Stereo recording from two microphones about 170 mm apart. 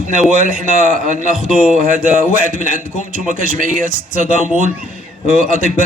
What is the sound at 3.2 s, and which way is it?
Speech, 50° right (ahead or behind).